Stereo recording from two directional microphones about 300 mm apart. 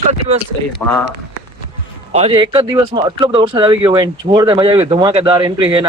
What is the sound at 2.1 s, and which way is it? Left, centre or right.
Speech, centre.